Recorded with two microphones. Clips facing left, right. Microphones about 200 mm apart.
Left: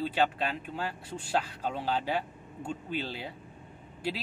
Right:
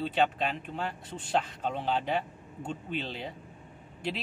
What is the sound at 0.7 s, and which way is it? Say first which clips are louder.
Speech: even; 5° left (ahead or behind).